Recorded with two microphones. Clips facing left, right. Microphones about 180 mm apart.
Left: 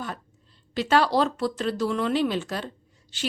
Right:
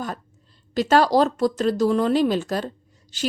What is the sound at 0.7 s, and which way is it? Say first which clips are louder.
A woman's voice: right 4 dB; 40° right (ahead or behind).